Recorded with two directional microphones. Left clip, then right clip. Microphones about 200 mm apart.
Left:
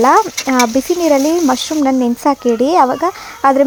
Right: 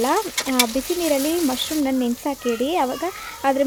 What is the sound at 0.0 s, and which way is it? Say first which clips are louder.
Speech: left 11 dB; 25° left (ahead or behind).